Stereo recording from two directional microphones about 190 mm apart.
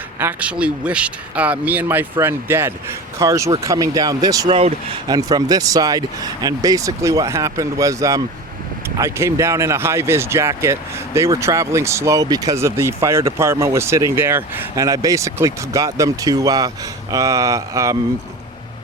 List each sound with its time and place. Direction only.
0.2 s speech: 10° right (ahead or behind)
4.4 s speech: 30° right (ahead or behind)